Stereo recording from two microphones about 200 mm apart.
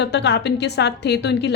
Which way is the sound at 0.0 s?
60° left (ahead or behind).